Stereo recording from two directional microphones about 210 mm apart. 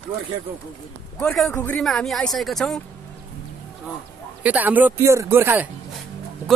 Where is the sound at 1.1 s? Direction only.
Centre (ahead or behind).